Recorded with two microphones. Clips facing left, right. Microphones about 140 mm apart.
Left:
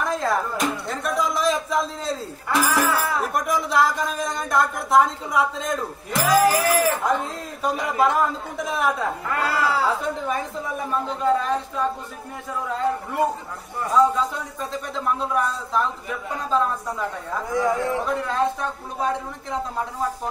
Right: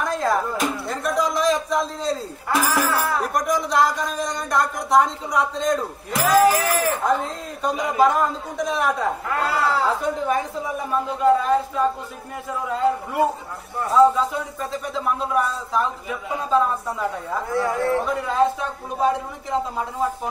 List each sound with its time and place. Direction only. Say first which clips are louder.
0.0 s speech: right 1 dB; centre (ahead or behind)
13.9 s speech: right 3 dB; centre (ahead or behind)
17.5 s speech: even; 15° left (ahead or behind)
18.0 s speech: right 2 dB; 5° right (ahead or behind)